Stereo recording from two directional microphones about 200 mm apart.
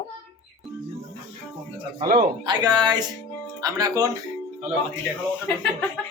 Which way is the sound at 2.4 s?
20° right (ahead or behind).